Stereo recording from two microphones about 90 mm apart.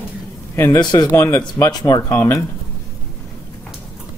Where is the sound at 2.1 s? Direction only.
30° left (ahead or behind).